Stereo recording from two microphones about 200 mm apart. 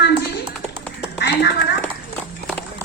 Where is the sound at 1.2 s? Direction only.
55° left (ahead or behind).